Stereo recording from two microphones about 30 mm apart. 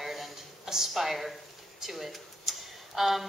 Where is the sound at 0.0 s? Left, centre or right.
Centre.